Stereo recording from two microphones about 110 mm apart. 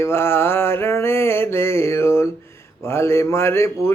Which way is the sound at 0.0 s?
25° left (ahead or behind).